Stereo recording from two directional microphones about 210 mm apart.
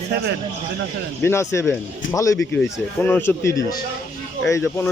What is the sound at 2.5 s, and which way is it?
Speech, 5° left (ahead or behind).